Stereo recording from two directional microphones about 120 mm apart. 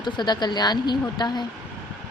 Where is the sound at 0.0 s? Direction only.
35° left (ahead or behind).